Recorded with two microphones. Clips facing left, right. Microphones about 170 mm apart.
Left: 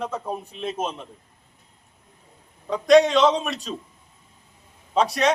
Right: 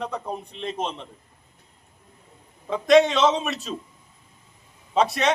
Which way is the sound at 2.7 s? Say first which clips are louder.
Left 1 dB; centre (ahead or behind).